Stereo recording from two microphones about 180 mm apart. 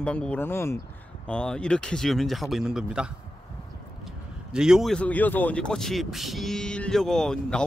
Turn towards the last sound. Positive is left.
turn(degrees=5)  # may be behind; listen again after turning